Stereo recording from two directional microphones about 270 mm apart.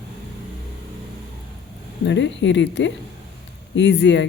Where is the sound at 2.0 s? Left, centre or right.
Left.